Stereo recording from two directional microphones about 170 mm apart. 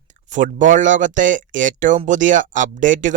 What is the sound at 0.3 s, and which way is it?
Speech, 45° right (ahead or behind).